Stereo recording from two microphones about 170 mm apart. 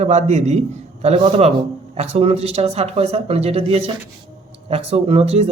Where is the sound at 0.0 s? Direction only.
40° right (ahead or behind).